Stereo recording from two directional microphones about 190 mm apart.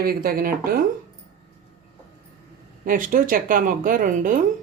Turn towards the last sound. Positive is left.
turn(degrees=-45)  # may be behind; listen again after turning